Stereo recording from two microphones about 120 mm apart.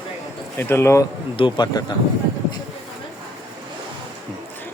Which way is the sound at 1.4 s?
40° left (ahead or behind).